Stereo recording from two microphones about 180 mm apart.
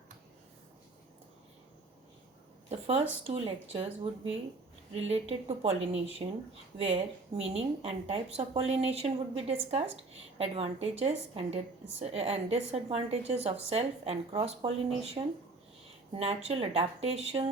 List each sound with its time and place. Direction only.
2.6 s a woman's voice: 35° right (ahead or behind)
16.1 s a woman's voice: 35° right (ahead or behind)